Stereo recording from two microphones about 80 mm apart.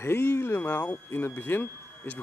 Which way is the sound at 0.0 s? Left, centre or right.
Left.